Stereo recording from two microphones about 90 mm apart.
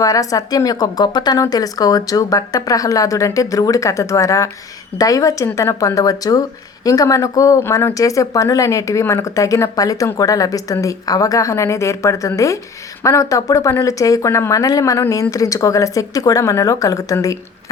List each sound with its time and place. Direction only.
0.0 s speech: 40° left (ahead or behind)